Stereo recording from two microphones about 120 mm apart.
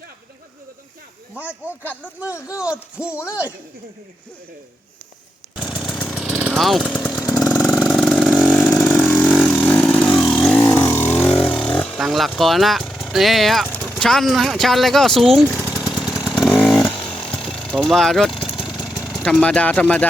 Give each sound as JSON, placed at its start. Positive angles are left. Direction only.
{"t": 1.4, "sound": "speech", "side_deg": -15}
{"t": 3.1, "sound": "speech", "side_deg": 20}
{"t": 5.5, "sound": "chainsaw", "side_deg": 0}
{"t": 6.5, "sound": "speech", "side_deg": 0}
{"t": 7.3, "sound": "vehicle", "side_deg": 0}
{"t": 8.3, "sound": "chainsaw", "side_deg": -5}
{"t": 9.2, "sound": "vehicle", "side_deg": 0}
{"t": 9.6, "sound": "vehicle", "side_deg": 10}
{"t": 14.0, "sound": "speech", "side_deg": 5}
{"t": 15.4, "sound": "a sound", "side_deg": 10}
{"t": 15.8, "sound": "chainsaw", "side_deg": 0}
{"t": 17.6, "sound": "vehicle", "side_deg": 5}